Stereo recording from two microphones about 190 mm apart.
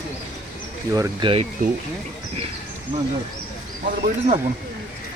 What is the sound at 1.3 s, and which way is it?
Speech, 30° right (ahead or behind).